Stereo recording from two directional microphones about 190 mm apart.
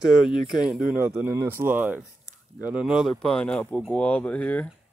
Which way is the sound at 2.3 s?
40° right (ahead or behind).